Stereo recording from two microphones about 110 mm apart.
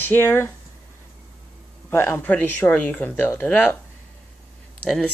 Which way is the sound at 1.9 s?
25° left (ahead or behind).